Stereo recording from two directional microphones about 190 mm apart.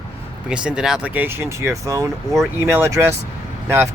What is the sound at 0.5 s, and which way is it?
Speech, 5° right (ahead or behind).